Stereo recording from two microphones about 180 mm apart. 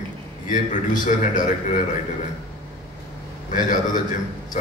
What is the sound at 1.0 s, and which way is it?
Speech, 45° left (ahead or behind).